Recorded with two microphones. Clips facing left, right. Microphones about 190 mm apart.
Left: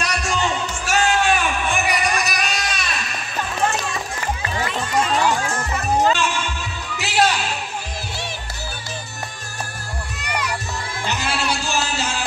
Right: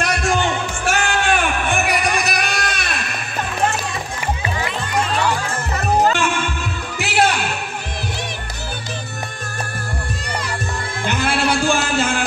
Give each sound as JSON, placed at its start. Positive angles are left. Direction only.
{"t": 0.0, "sound": "music", "side_deg": -55}
{"t": 6.1, "sound": "music", "side_deg": -55}
{"t": 10.2, "sound": "music", "side_deg": -30}
{"t": 11.1, "sound": "music", "side_deg": -55}